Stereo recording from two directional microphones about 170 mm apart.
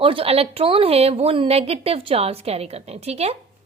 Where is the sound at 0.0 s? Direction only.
35° right (ahead or behind).